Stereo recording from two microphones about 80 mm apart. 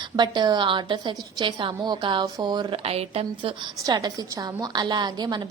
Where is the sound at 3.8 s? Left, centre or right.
Right.